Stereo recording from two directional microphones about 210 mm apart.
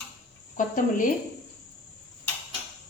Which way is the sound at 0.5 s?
40° left (ahead or behind).